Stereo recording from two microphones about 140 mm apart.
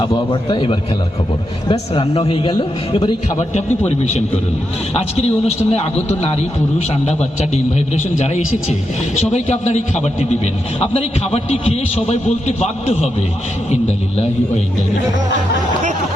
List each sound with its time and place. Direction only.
0.3 s a man's voice: 35° left (ahead or behind)
3.3 s a man's voice: 55° left (ahead or behind)
9.3 s a man's voice: 55° left (ahead or behind)